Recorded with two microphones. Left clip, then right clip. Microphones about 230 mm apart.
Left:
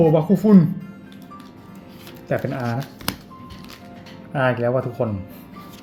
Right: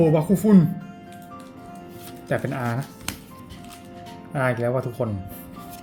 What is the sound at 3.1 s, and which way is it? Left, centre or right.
Music, left.